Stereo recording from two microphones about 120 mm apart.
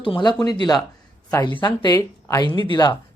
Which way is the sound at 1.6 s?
40° left (ahead or behind).